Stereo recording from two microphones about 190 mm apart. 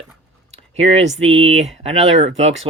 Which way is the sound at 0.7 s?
35° right (ahead or behind).